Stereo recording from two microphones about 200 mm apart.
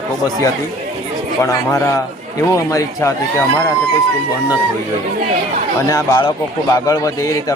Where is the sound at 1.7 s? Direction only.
15° left (ahead or behind).